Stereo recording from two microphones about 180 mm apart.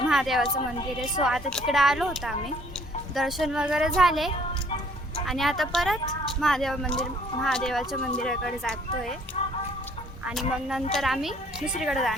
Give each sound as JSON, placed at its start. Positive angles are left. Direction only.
{"t": 0.1, "sound": "a woman's voice", "side_deg": 0}
{"t": 9.4, "sound": "music", "side_deg": 40}
{"t": 10.2, "sound": "speech", "side_deg": 0}